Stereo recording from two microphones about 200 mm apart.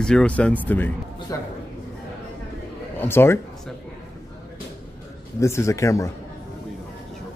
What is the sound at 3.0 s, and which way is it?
Speech, 10° left (ahead or behind).